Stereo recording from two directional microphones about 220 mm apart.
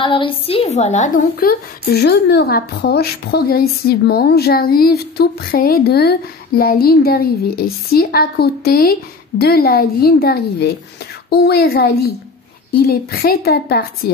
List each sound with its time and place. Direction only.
0.0 s a woman's voice: 25° left (ahead or behind); by 14.1 s 45° left (ahead or behind)